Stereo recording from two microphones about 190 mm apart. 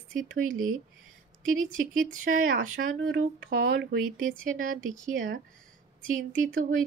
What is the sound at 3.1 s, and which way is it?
Speech, 70° right (ahead or behind).